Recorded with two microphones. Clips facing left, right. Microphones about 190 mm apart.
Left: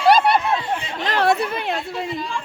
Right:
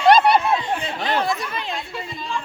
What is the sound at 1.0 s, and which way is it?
Speech, 70° left (ahead or behind).